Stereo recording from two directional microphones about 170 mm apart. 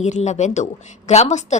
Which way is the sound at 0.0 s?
40° left (ahead or behind).